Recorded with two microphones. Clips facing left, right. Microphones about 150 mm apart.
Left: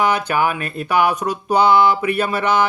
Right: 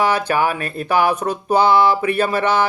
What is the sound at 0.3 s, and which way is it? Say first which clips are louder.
Speech: even; 35° right (ahead or behind).